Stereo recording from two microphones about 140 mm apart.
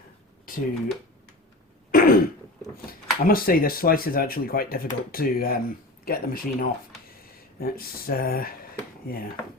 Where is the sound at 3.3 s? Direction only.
90° left.